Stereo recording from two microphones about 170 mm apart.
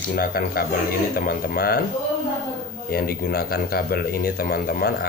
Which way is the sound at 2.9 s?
60° left (ahead or behind).